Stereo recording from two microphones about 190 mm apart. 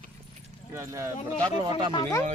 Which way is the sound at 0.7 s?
15° right (ahead or behind).